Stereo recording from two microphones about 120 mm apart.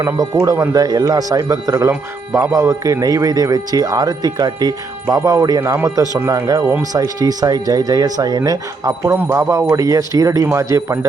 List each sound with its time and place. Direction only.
0.0 s a man's voice: 25° right (ahead or behind)